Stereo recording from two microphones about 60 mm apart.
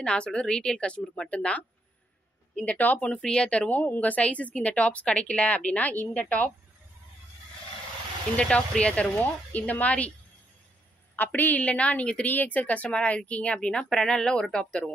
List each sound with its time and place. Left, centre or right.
0.0 s a woman's voice: centre
8.4 s a woman's voice: centre
11.1 s a woman's voice: left